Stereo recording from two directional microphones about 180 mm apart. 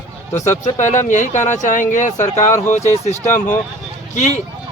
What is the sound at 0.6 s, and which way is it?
Speech, 40° left (ahead or behind).